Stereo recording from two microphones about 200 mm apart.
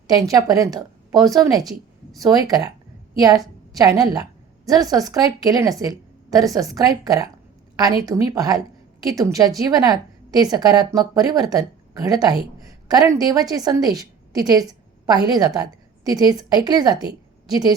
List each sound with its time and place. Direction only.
0.1 s a woman's voice: 20° right (ahead or behind)